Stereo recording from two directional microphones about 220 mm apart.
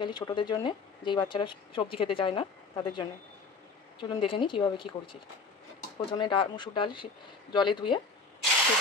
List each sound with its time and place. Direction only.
0.0 s speech: 20° left (ahead or behind)